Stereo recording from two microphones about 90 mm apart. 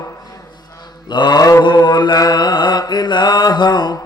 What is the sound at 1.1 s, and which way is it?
Mantra, 55° left (ahead or behind).